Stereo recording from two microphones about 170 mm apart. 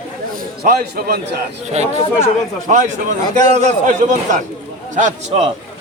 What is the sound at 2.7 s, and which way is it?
A man's voice, 45° right (ahead or behind).